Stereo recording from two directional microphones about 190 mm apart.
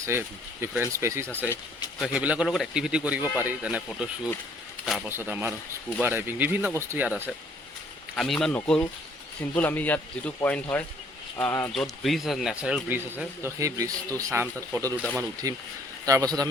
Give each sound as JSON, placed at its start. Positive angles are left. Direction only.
{"t": 0.0, "sound": "speech", "side_deg": -15}
{"t": 8.1, "sound": "speech", "side_deg": 5}